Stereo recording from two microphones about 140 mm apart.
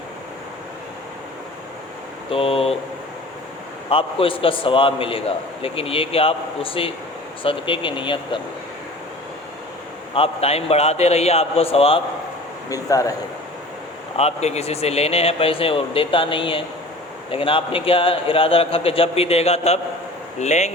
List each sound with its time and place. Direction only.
2.3 s a man's voice: 40° left (ahead or behind)
3.8 s a man's voice: 40° left (ahead or behind)
10.2 s a man's voice: 45° left (ahead or behind)
12.7 s speech: 25° left (ahead or behind)
14.2 s a man's voice: 50° left (ahead or behind)